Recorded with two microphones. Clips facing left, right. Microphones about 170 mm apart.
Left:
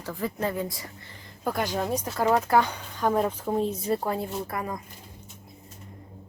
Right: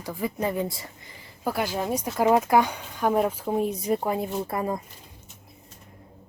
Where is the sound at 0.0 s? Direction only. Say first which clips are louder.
Right 1 dB; 10° right (ahead or behind).